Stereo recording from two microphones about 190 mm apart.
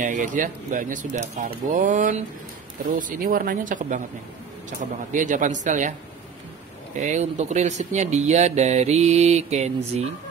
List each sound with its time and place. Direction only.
0.0 s speech: 40° right (ahead or behind)
7.0 s speech: 40° right (ahead or behind)